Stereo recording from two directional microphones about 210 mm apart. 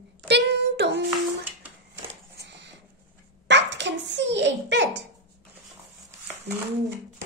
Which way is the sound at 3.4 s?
60° right (ahead or behind).